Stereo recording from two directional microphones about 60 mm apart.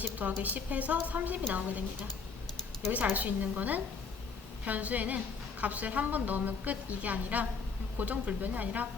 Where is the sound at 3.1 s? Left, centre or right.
Right.